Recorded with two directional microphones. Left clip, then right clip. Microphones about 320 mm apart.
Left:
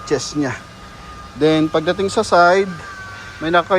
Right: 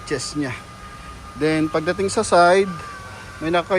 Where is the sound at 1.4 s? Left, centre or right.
Centre.